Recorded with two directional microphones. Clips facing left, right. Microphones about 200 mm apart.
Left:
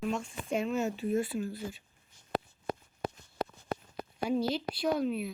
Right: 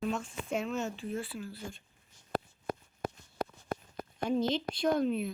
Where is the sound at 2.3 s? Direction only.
50° right (ahead or behind).